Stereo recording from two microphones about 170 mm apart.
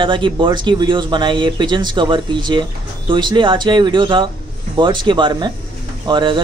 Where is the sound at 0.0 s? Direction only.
30° right (ahead or behind).